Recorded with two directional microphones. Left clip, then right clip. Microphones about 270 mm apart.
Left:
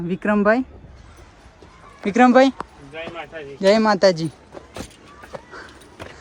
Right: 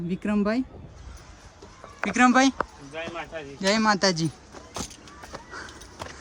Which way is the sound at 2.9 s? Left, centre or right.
Right.